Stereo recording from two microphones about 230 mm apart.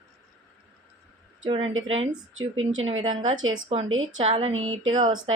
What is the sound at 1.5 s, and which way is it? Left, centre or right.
Speech, right.